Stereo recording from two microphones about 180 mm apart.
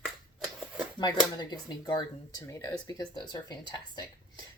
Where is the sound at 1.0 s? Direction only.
25° left (ahead or behind).